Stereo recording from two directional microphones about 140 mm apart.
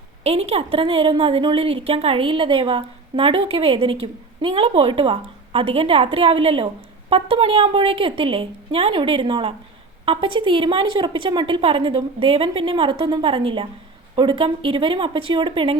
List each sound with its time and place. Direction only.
0.3 s a woman's voice: 45° right (ahead or behind)